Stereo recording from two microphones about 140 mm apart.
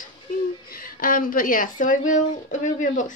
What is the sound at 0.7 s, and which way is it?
Speech, 90° left.